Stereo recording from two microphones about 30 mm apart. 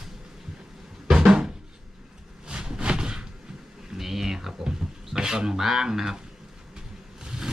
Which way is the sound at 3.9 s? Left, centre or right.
Centre.